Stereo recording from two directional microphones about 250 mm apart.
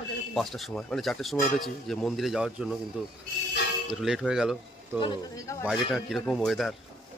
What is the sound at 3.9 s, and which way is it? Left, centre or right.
Speech, centre.